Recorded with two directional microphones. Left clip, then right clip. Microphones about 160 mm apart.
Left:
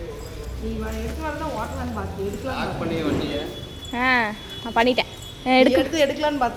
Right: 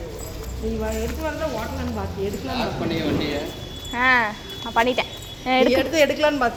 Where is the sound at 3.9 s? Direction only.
45° left (ahead or behind).